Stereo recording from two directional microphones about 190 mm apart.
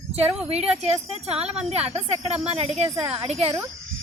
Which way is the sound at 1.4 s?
5° right (ahead or behind).